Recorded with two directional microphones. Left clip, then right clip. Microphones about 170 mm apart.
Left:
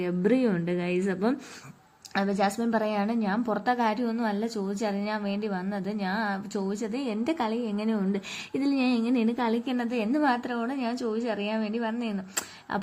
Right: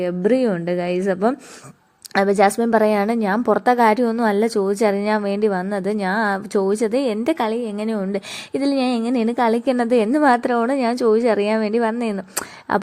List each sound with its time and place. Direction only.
0.0 s a woman's voice: 30° right (ahead or behind)
2.1 s a woman's voice: 55° right (ahead or behind)